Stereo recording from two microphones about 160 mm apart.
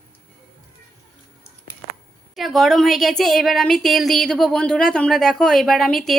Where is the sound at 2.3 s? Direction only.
Centre (ahead or behind).